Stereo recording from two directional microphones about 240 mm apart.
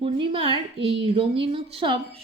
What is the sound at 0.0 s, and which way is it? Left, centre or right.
A woman's voice, right.